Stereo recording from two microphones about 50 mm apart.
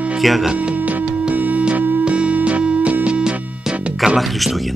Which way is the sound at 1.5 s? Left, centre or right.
Right.